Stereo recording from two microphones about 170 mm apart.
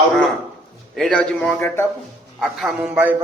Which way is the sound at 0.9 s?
5° left (ahead or behind).